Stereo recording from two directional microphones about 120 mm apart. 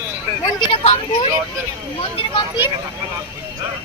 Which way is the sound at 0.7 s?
55° left (ahead or behind).